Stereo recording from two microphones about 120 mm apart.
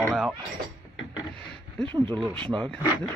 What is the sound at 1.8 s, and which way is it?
Speech, 40° right (ahead or behind).